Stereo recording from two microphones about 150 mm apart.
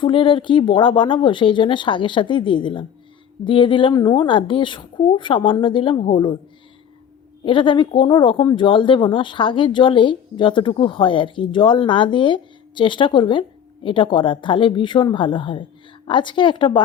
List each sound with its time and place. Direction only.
0.0 s speech: 35° left (ahead or behind)
7.4 s speech: 35° left (ahead or behind)